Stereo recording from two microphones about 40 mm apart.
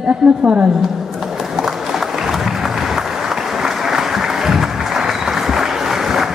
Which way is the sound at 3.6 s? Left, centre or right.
Centre.